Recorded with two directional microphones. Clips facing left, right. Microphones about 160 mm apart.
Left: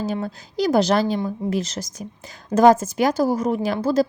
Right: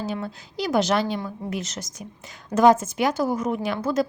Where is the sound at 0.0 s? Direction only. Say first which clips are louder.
Left 4 dB; 40° left (ahead or behind).